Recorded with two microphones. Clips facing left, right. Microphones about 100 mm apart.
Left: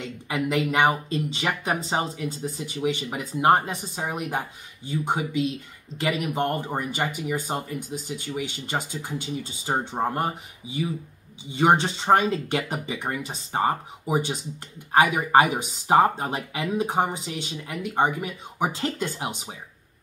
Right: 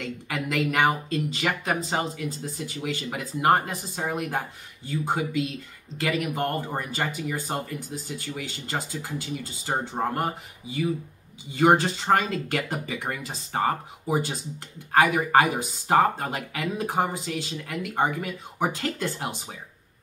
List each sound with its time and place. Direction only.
0.0 s speech: 20° left (ahead or behind)